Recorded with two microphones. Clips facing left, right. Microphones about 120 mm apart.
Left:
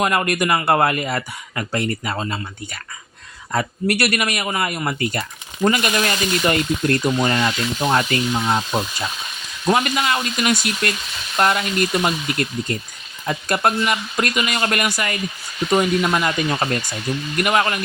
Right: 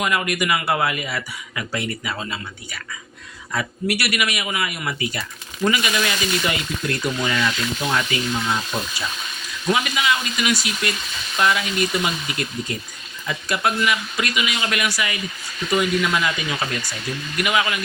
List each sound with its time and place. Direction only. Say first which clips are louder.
0.0 s speech: left 3 dB; 45° left (ahead or behind)
9.6 s speech: left 2 dB; 50° left (ahead or behind)